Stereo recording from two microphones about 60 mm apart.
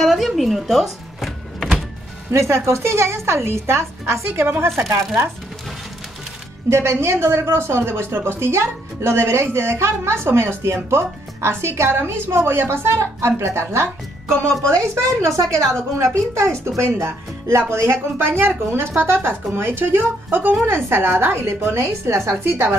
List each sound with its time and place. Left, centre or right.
0.0 s a sound: centre
2.3 s a woman's voice: right
6.7 s speech: right
14.8 s a woman's voice: right
17.0 s a woman's voice: right